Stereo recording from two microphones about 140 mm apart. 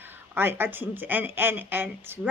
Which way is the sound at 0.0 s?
15° right (ahead or behind).